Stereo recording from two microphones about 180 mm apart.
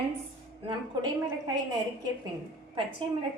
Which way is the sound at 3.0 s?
30° right (ahead or behind).